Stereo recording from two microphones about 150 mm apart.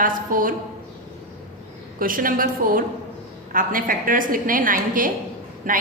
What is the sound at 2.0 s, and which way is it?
A woman's voice, 70° right (ahead or behind).